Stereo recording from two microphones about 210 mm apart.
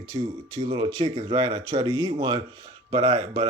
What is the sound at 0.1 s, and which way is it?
Speech, 25° right (ahead or behind).